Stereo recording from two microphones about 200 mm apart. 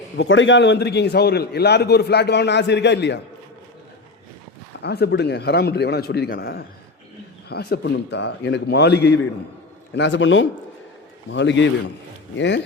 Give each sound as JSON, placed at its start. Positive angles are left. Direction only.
{"t": 0.2, "sound": "a man's voice", "side_deg": 70}
{"t": 4.8, "sound": "a man's voice", "side_deg": 55}